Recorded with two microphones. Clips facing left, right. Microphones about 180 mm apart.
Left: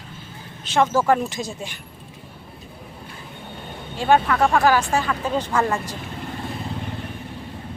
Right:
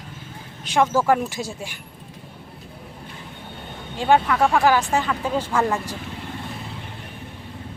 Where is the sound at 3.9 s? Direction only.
15° right (ahead or behind).